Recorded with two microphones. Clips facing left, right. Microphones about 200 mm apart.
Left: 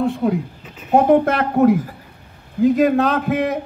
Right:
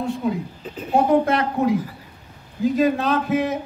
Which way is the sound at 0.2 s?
55° left (ahead or behind).